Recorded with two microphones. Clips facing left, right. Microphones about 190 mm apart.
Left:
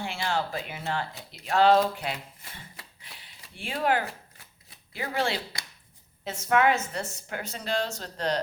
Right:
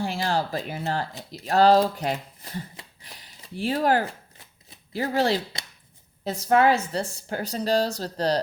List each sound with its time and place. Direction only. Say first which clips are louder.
0.0 s speech: right 4 dB; 35° right (ahead or behind)
3.0 s a sound: right 3 dB; 40° right (ahead or behind)
4.9 s speech: right 6 dB; 40° right (ahead or behind)